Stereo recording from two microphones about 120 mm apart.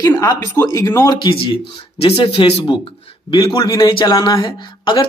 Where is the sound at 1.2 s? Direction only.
50° left (ahead or behind).